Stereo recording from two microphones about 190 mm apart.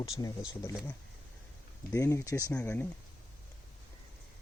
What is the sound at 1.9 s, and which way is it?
Speech, 15° left (ahead or behind).